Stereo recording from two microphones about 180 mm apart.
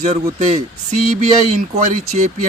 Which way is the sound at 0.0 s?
40° right (ahead or behind).